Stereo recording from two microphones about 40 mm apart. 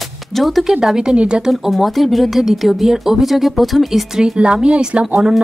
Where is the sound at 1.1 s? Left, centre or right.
Right.